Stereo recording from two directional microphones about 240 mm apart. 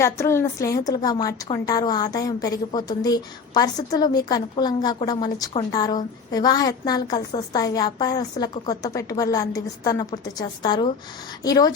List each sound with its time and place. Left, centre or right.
0.0 s a woman's voice: centre